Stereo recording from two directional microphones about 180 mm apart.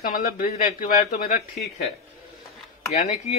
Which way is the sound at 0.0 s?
50° left (ahead or behind).